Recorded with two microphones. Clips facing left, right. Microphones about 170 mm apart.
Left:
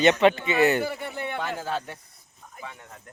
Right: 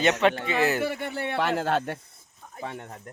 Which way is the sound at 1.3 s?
80° right.